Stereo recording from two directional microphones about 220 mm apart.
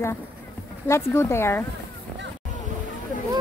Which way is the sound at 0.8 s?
10° left (ahead or behind).